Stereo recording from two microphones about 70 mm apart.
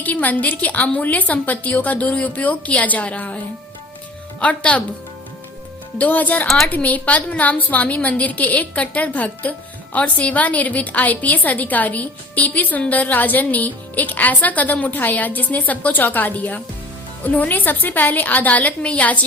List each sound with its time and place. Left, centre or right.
0.0 s a woman's voice: left
6.0 s a woman's voice: left